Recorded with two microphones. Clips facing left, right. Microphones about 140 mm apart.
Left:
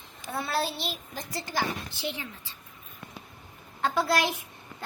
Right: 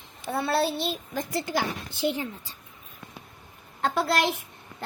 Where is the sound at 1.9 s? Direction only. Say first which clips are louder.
Right 8 dB; 50° right (ahead or behind).